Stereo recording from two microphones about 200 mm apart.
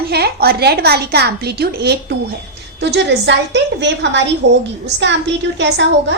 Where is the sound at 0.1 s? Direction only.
50° right (ahead or behind).